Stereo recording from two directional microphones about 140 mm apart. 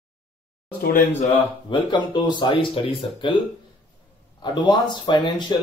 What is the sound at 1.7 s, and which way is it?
Speech, 35° left (ahead or behind).